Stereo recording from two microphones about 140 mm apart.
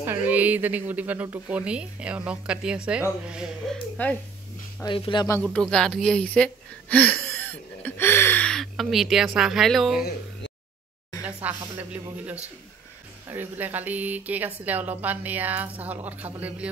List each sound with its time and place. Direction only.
0.3 s speech: 10° right (ahead or behind); by 4.2 s 5° left (ahead or behind)
4.8 s speech: 35° left (ahead or behind)
5.4 s speech: 5° left (ahead or behind)
11.4 s speech: 10° right (ahead or behind)
13.3 s speech: 15° right (ahead or behind)